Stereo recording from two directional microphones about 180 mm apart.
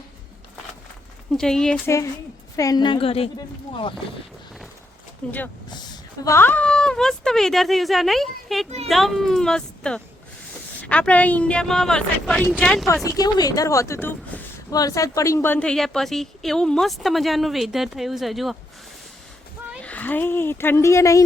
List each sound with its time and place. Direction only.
1.3 s speech: 5° left (ahead or behind)
2.6 s a woman's voice: 20° left (ahead or behind)
5.2 s speech: 10° left (ahead or behind)
12.8 s speech: 15° left (ahead or behind); by 18.5 s centre (ahead or behind)
19.8 s speech: 10° left (ahead or behind)